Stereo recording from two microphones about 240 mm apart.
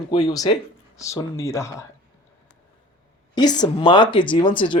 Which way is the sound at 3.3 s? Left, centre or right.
Centre.